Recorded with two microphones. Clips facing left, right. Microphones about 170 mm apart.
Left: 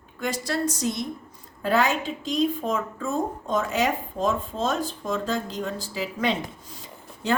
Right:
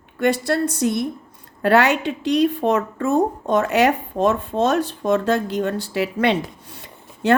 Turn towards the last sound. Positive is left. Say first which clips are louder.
# right 8 dB
turn(degrees=-70)  # may be behind; listen again after turning